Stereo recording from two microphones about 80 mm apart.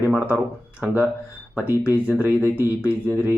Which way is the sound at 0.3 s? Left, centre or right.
Right.